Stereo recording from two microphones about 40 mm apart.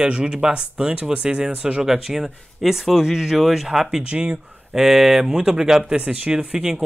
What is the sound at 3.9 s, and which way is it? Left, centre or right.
Speech, right.